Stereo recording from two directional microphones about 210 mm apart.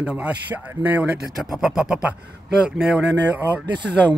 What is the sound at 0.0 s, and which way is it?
Speech, 5° right (ahead or behind).